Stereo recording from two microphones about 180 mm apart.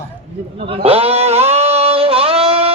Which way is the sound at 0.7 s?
35° right (ahead or behind).